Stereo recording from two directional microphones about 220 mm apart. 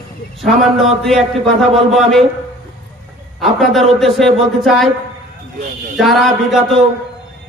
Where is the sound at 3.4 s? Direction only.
Centre (ahead or behind).